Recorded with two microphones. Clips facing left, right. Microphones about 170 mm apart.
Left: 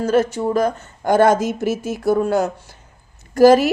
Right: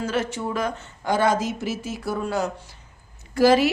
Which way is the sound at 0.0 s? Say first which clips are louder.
Left 8 dB; 40° left (ahead or behind).